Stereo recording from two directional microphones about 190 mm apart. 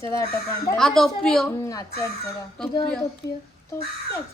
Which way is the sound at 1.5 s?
15° left (ahead or behind).